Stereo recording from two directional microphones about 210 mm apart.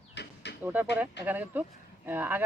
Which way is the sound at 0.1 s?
55° left (ahead or behind).